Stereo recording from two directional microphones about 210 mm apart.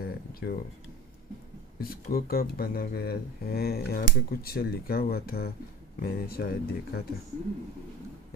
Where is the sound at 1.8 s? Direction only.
45° left (ahead or behind).